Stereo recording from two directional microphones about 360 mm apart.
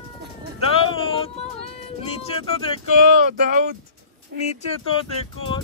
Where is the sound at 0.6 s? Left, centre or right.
Centre.